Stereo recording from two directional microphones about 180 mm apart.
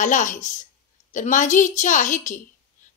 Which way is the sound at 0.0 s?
45° left (ahead or behind).